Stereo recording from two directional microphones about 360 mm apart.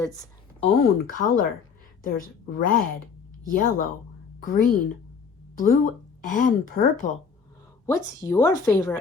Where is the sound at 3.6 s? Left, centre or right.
Left.